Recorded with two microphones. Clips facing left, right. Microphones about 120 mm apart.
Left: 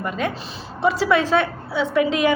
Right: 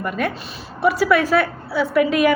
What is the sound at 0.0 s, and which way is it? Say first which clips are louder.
A woman's voice: right 1 dB; 20° left (ahead or behind).